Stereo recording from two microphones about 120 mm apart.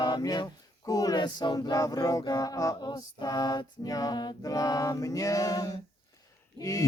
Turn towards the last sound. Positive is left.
turn(degrees=30)  # may be behind; listen again after turning